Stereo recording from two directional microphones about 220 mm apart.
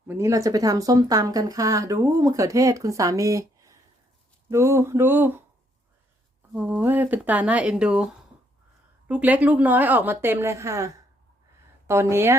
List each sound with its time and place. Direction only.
0.1 s speech: 15° right (ahead or behind)
6.5 s speech: 10° right (ahead or behind)